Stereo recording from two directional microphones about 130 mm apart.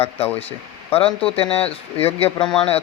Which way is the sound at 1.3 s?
45° left (ahead or behind).